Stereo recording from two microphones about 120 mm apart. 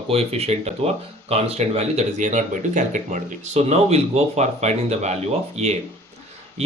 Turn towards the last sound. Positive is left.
turn(degrees=-65)  # may be behind; listen again after turning